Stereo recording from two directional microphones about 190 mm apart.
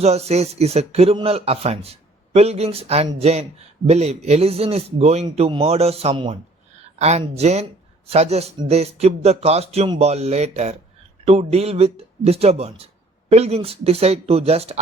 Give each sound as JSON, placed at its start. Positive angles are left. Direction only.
{"t": 0.0, "sound": "speech", "side_deg": -35}